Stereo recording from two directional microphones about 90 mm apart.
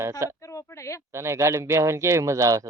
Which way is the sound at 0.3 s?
35° left (ahead or behind).